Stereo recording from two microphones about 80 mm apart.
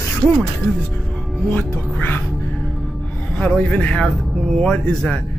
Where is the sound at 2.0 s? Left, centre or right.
Left.